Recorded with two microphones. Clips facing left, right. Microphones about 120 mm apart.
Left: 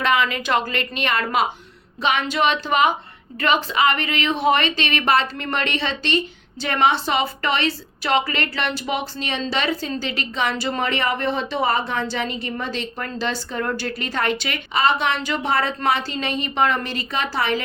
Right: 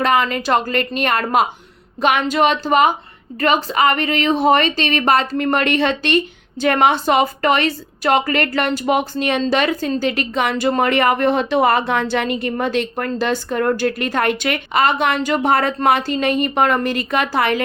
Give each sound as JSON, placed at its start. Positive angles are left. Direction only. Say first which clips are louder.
{"t": 0.0, "sound": "speech", "louder": "right 4 dB", "side_deg": -40}